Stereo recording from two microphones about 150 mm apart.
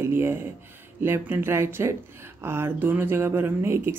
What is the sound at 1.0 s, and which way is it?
Speech, 15° right (ahead or behind).